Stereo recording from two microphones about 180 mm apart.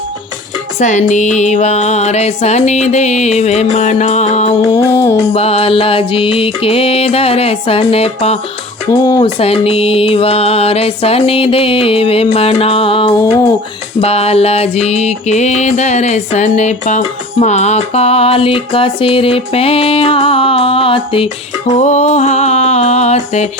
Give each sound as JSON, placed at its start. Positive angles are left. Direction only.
{"t": 0.8, "sound": "music", "side_deg": 40}
{"t": 8.9, "sound": "speech", "side_deg": 20}
{"t": 9.4, "sound": "music", "side_deg": 35}